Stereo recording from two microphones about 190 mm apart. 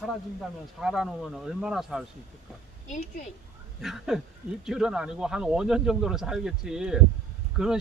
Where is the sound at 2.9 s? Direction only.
40° left (ahead or behind).